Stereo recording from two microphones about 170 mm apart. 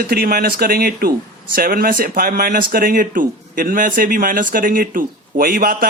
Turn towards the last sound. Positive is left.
turn(degrees=-55)  # may be behind; listen again after turning